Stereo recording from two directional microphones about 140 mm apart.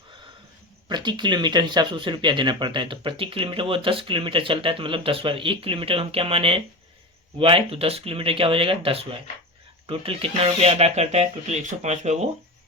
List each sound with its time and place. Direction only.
0.9 s speech: 30° right (ahead or behind); by 12.3 s 55° right (ahead or behind)